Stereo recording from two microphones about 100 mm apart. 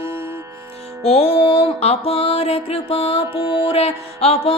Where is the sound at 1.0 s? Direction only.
80° left.